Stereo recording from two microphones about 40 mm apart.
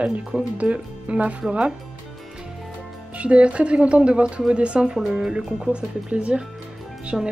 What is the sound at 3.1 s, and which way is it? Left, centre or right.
Speech, right.